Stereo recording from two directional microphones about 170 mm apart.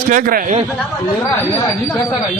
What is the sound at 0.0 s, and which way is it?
Speech, 50° right (ahead or behind).